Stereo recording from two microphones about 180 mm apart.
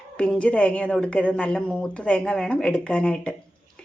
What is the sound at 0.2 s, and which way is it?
Speech, 5° left (ahead or behind).